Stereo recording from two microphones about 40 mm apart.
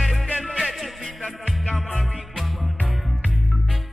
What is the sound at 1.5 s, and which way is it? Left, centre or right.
Music, centre.